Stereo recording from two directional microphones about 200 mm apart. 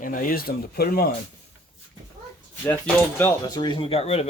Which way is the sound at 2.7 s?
10° left (ahead or behind).